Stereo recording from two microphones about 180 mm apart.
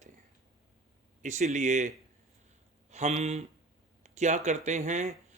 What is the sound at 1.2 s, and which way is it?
Speech, 40° right (ahead or behind).